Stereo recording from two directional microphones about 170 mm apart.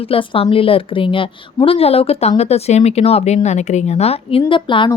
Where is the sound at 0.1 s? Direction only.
35° left (ahead or behind).